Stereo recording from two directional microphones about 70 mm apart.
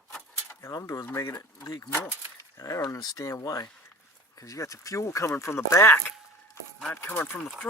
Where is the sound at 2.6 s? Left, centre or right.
Left.